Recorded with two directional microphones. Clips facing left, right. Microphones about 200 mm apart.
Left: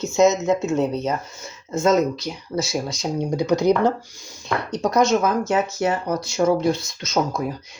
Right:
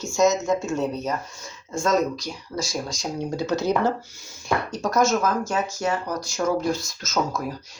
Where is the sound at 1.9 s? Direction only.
Centre (ahead or behind).